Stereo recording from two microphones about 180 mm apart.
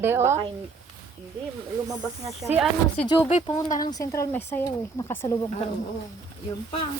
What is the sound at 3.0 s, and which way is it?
Speech, 35° left (ahead or behind).